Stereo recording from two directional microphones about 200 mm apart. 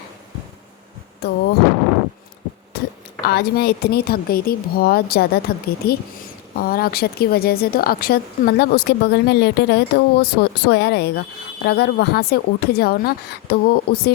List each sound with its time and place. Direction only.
1.2 s thunder: 55° left (ahead or behind)
2.7 s a sound: 50° left (ahead or behind)
3.2 s speech: 55° left (ahead or behind)